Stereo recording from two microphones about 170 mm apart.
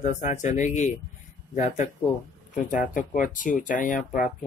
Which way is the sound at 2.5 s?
50° left (ahead or behind).